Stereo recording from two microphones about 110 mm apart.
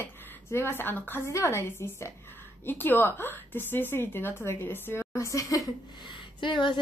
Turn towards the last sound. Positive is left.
turn(degrees=45)  # may be behind; listen again after turning